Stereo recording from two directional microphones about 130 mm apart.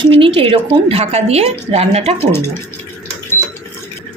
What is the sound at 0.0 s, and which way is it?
A woman's voice, 40° right (ahead or behind).